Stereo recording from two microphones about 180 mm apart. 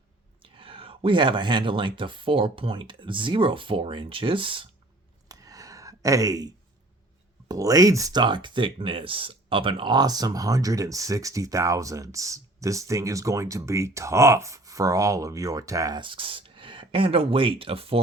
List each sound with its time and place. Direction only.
0.4 s speech: 30° right (ahead or behind)
5.3 s a sound: 20° right (ahead or behind)
7.4 s speech: 20° right (ahead or behind)